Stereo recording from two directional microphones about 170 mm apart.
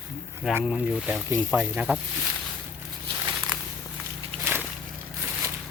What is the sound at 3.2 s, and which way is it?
Walk, 20° right (ahead or behind).